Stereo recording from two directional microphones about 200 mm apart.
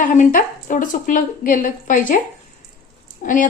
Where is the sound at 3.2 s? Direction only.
40° left (ahead or behind).